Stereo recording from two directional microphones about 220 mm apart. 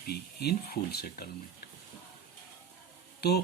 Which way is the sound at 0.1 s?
45° left (ahead or behind).